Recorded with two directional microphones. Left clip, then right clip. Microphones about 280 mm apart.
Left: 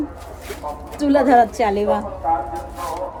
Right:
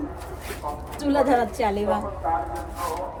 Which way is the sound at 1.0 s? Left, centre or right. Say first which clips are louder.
Left 7 dB; left.